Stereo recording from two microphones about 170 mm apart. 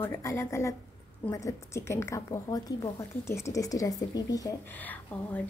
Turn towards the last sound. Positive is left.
turn(degrees=10)  # may be behind; listen again after turning